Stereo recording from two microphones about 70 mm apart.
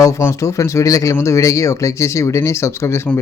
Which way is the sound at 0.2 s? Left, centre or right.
Left.